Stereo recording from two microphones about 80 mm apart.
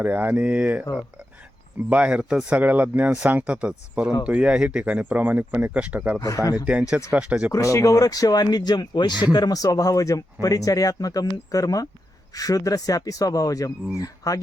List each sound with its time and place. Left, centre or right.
0.0 s speech: right
1.9 s speech: centre
6.1 s speech: left
7.1 s speech: centre
7.5 s speech: left